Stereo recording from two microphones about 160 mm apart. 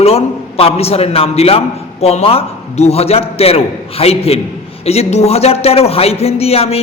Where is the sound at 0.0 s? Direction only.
40° left (ahead or behind).